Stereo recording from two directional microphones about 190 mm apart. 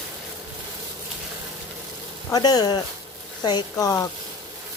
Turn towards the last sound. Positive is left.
turn(degrees=20)  # may be behind; listen again after turning